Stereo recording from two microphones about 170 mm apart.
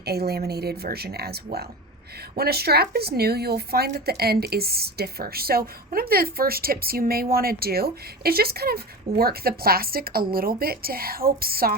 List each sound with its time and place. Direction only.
0.0 s speech: 70° right (ahead or behind)